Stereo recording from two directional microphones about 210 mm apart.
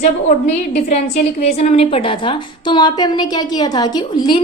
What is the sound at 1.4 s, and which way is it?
A woman's voice, 30° left (ahead or behind).